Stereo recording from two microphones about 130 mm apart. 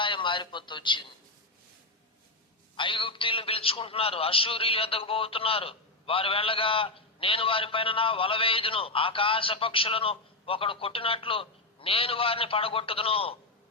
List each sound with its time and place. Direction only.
0.0 s speech: 40° left (ahead or behind)
2.7 s a man's voice: 40° left (ahead or behind)